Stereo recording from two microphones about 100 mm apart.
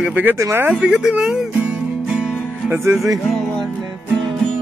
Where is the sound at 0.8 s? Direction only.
10° right (ahead or behind).